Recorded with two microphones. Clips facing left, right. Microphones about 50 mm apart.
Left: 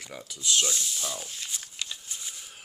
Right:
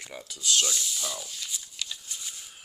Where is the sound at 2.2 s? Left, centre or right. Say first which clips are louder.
Even; centre.